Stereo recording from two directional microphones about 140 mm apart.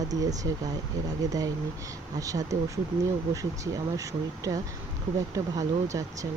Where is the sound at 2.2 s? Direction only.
25° right (ahead or behind).